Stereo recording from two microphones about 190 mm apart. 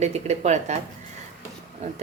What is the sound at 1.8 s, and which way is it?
Speech, 35° right (ahead or behind).